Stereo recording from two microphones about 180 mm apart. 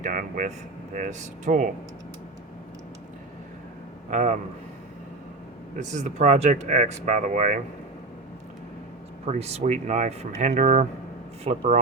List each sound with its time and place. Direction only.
0.0 s speech: 45° right (ahead or behind)
4.1 s speech: 40° right (ahead or behind)
5.9 s speech: 40° right (ahead or behind)
9.2 s speech: 35° right (ahead or behind)